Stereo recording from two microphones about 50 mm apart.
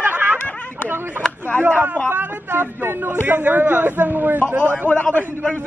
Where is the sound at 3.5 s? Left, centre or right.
Right.